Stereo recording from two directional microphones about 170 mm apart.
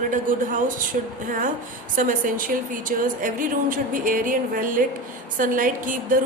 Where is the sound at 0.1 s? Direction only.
50° right (ahead or behind).